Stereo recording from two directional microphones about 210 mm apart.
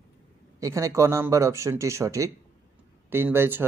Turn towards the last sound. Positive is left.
turn(degrees=-10)  # may be behind; listen again after turning